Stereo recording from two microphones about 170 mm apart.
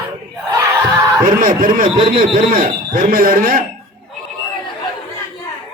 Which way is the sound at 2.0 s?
30° right (ahead or behind).